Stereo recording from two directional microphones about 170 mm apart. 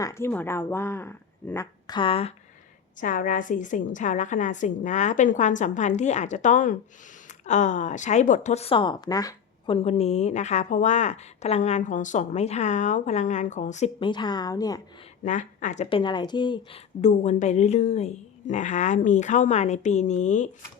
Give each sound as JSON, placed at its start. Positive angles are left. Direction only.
{"t": 0.0, "sound": "speech", "side_deg": 15}
{"t": 1.9, "sound": "speech", "side_deg": 30}
{"t": 3.0, "sound": "a woman's voice", "side_deg": 50}
{"t": 9.7, "sound": "a woman's voice", "side_deg": 40}
{"t": 14.0, "sound": "a woman's voice", "side_deg": 25}
{"t": 15.2, "sound": "speech", "side_deg": 45}
{"t": 17.0, "sound": "a woman's voice", "side_deg": 45}